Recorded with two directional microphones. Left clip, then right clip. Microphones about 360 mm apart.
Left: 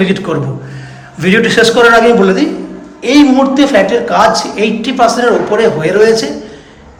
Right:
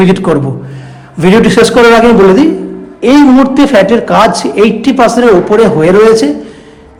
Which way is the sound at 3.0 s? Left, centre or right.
Centre.